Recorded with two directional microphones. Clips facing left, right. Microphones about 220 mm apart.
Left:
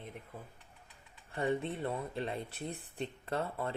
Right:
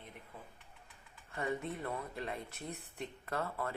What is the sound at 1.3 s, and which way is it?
Speech, 30° left (ahead or behind).